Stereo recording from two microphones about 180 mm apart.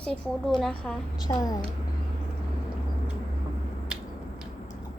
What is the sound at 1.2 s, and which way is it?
Speech, 20° left (ahead or behind).